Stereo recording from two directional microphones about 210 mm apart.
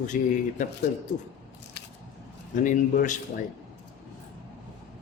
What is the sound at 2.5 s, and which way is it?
Speech, 40° left (ahead or behind).